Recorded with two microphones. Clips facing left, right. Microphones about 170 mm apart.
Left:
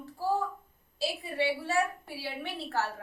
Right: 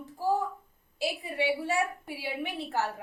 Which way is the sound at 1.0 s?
15° right (ahead or behind).